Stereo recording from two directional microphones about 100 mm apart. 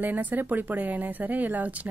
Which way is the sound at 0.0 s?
15° right (ahead or behind).